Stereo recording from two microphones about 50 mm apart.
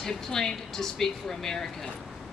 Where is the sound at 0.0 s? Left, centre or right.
Centre.